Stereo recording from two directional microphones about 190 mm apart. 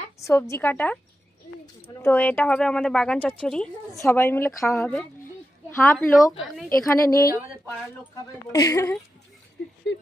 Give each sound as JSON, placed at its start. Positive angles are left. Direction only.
{"t": 0.2, "sound": "speech", "side_deg": 15}
{"t": 2.0, "sound": "speech", "side_deg": 10}
{"t": 8.5, "sound": "speech", "side_deg": 20}
{"t": 9.9, "sound": "speech", "side_deg": 75}